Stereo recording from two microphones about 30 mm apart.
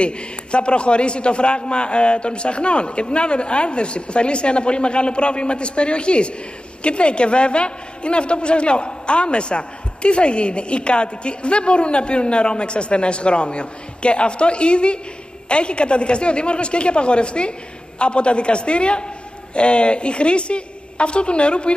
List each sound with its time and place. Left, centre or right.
0.0 s a man's voice: left